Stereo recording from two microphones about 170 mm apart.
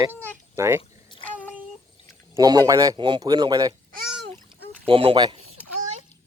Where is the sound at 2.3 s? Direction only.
20° right (ahead or behind).